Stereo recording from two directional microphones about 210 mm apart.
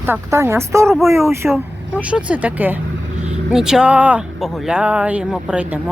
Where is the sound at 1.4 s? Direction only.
Centre (ahead or behind).